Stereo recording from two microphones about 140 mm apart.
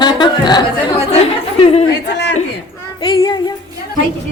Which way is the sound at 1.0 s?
45° left (ahead or behind).